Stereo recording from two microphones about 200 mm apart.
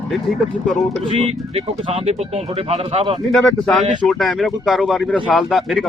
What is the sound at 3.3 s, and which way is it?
Speech, centre (ahead or behind).